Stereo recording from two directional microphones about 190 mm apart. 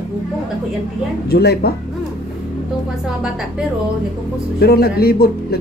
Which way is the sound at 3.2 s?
5° right (ahead or behind).